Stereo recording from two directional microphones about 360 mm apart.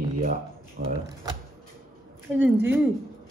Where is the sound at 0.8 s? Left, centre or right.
Right.